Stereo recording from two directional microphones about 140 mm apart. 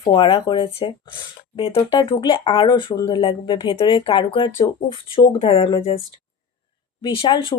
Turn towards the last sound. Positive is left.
turn(degrees=35)  # may be behind; listen again after turning